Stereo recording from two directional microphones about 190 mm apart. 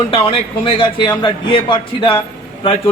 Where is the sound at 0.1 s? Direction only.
25° left (ahead or behind).